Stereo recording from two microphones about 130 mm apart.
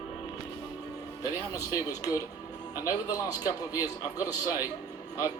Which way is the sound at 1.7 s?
25° left (ahead or behind).